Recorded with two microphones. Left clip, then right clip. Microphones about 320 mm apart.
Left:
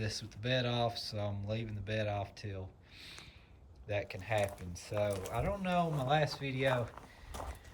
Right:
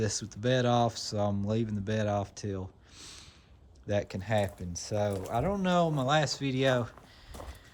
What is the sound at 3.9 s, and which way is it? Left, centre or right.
Speech, centre.